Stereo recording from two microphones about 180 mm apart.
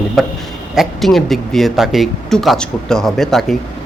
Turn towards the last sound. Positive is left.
turn(degrees=0)  # may be behind; listen again after turning